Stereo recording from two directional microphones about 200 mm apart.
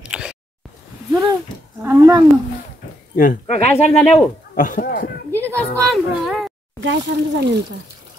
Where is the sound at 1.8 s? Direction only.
15° right (ahead or behind).